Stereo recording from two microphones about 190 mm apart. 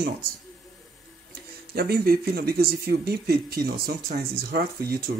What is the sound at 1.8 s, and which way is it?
Speech, 55° right (ahead or behind).